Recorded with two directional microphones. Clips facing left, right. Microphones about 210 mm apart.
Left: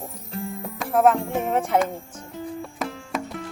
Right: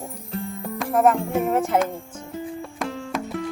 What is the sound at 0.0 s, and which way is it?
Music, centre (ahead or behind).